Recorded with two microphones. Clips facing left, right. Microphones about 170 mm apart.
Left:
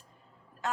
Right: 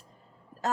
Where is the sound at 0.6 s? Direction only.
40° right (ahead or behind).